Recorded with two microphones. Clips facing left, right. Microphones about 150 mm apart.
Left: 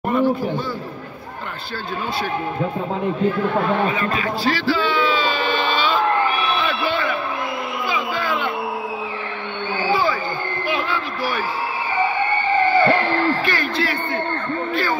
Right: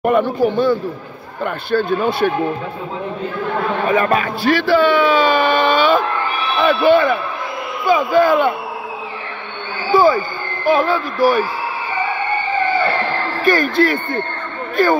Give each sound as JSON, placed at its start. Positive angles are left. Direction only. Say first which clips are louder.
{"t": 0.0, "sound": "speech", "louder": "right 4 dB", "side_deg": -65}
{"t": 3.9, "sound": "a sound", "louder": "right 6 dB", "side_deg": -50}
{"t": 6.6, "sound": "a man's voice", "louder": "right 10 dB", "side_deg": -50}
{"t": 10.7, "sound": "speech", "louder": "right 11 dB", "side_deg": -45}
{"t": 13.4, "sound": "speech", "louder": "right 8 dB", "side_deg": -45}